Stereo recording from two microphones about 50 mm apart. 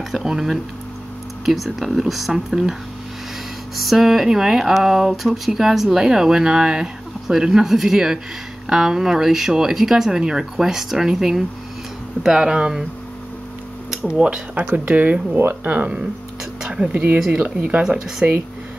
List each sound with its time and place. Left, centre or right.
0.1 s speech: centre
3.7 s speech: centre
14.0 s speech: right
16.6 s speech: centre
16.9 s speech: right
17.8 s speech: centre